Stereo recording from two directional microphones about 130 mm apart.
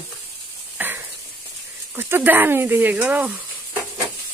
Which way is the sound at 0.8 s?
15° right (ahead or behind).